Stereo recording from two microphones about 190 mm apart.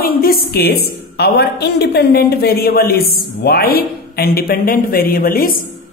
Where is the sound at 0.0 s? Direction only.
50° left (ahead or behind).